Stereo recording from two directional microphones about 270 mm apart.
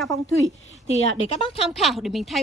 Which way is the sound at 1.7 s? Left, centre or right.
Centre.